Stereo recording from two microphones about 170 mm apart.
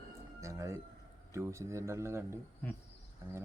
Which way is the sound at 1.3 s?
15° right (ahead or behind).